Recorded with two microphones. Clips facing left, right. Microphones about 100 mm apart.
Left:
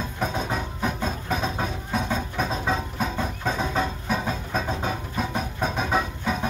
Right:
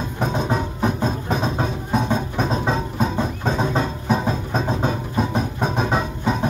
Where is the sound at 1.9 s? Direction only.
25° right (ahead or behind).